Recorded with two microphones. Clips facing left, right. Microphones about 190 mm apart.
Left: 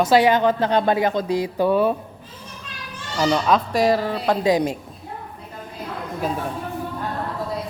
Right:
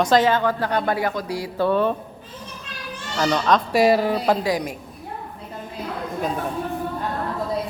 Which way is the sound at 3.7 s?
10° right (ahead or behind).